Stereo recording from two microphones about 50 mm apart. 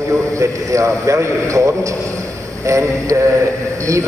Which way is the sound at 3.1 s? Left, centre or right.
Right.